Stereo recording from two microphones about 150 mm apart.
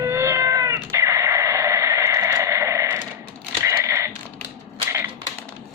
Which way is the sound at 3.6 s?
20° right (ahead or behind).